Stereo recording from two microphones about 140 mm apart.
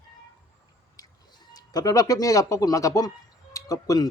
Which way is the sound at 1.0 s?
25° left (ahead or behind).